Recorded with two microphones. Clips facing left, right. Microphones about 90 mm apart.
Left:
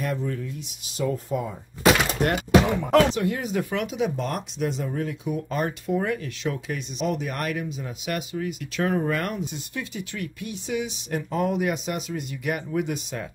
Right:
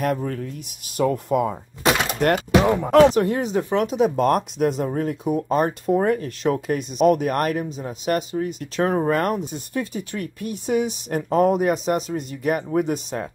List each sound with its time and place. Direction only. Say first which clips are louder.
0.0 s speech: right 5 dB; 55° right (ahead or behind)
2.3 s speech: right 1 dB; 40° right (ahead or behind)